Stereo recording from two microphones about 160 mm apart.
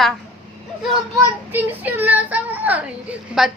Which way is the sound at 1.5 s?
10° right (ahead or behind).